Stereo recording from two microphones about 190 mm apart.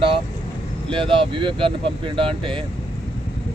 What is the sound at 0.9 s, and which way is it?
Speech, 25° right (ahead or behind).